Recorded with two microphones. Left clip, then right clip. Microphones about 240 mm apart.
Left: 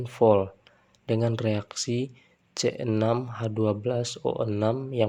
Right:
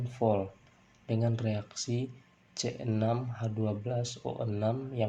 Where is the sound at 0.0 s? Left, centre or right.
Left.